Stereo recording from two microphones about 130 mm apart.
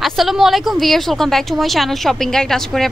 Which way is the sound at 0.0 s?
Centre (ahead or behind).